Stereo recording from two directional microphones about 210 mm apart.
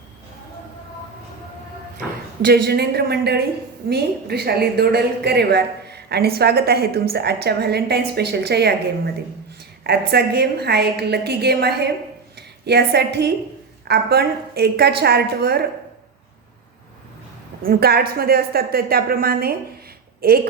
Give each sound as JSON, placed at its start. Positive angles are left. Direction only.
{"t": 2.4, "sound": "a woman's voice", "side_deg": -50}
{"t": 9.8, "sound": "a woman's voice", "side_deg": -50}
{"t": 17.6, "sound": "a woman's voice", "side_deg": -45}